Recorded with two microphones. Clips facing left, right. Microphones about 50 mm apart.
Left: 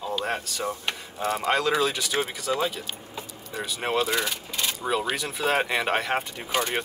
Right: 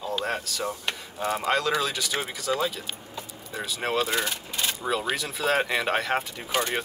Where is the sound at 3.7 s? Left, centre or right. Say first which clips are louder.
Left 1 dB; centre.